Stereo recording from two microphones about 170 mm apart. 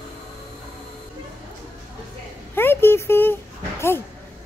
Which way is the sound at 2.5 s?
15° left (ahead or behind).